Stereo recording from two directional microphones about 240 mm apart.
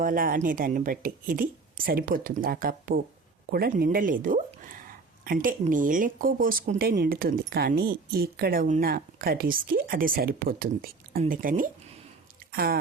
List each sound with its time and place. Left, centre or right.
0.0 s a woman's voice: right